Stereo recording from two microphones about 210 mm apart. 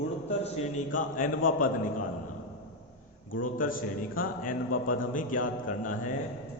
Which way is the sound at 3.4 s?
40° left (ahead or behind).